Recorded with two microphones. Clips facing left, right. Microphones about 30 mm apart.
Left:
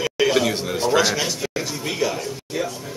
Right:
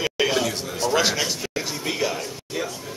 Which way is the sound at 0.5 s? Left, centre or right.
Left.